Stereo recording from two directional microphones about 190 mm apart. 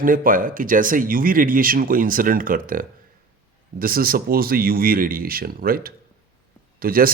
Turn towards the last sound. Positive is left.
turn(degrees=-50)  # may be behind; listen again after turning